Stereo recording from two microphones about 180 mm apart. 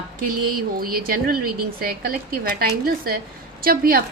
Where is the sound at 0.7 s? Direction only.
55° right (ahead or behind).